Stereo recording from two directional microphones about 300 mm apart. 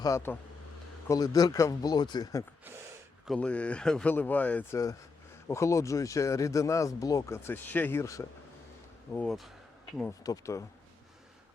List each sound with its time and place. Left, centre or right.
0.0 s speech: centre